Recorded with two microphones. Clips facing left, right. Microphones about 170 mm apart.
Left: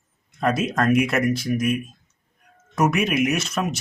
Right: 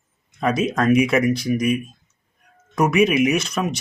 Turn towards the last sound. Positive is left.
turn(degrees=0)  # may be behind; listen again after turning